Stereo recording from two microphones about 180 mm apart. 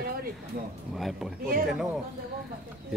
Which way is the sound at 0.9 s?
Centre (ahead or behind).